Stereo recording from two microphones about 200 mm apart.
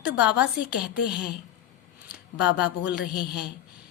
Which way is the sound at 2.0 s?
5° right (ahead or behind).